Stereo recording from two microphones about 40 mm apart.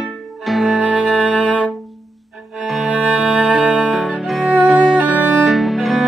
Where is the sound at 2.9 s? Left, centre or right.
Right.